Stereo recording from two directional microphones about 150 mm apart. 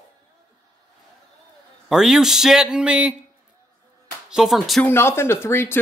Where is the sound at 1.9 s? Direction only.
5° right (ahead or behind).